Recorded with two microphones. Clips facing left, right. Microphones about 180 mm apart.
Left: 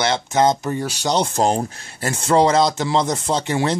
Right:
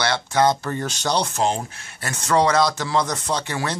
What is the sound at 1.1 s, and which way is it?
Speech, 30° left (ahead or behind).